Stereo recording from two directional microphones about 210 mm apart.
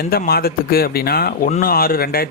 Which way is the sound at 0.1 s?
45° left (ahead or behind).